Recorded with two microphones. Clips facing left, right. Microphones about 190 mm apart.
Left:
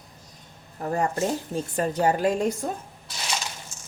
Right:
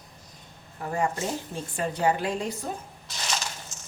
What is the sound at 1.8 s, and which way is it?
Speech, 45° left (ahead or behind).